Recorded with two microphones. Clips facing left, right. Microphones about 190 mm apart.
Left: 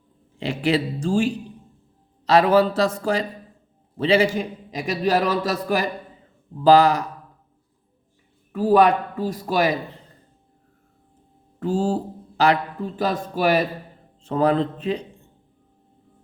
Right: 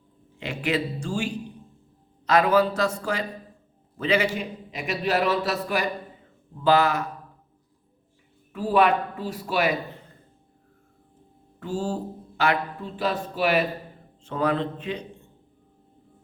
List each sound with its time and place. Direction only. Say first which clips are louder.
0.3 s a man's voice: left 5 dB; 35° left (ahead or behind)
8.5 s a man's voice: left 4 dB; 40° left (ahead or behind)
11.6 s a man's voice: left 6 dB; 35° left (ahead or behind)